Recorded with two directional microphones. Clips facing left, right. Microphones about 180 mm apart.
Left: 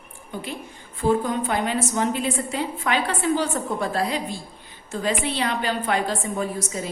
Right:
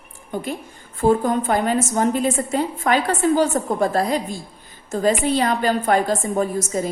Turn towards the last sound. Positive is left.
turn(degrees=-45)  # may be behind; listen again after turning